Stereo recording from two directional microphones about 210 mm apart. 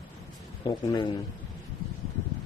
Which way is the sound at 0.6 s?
20° left (ahead or behind).